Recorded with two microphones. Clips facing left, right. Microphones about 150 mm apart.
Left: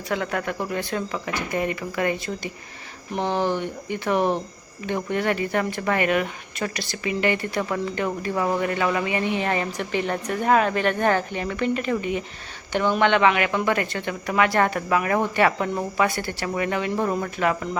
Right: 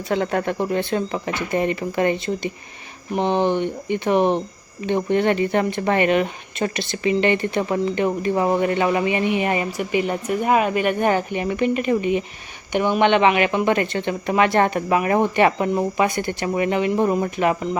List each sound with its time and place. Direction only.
0.1 s speech: 30° right (ahead or behind)